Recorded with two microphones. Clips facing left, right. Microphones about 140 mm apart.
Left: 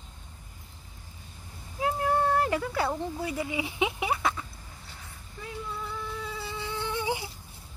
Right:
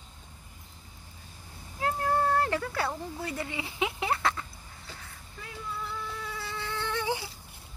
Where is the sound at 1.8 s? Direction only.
15° left (ahead or behind).